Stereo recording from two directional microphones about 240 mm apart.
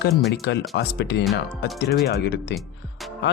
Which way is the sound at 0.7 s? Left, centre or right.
Left.